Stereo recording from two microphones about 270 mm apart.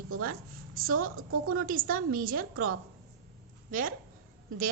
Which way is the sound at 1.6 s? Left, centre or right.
Right.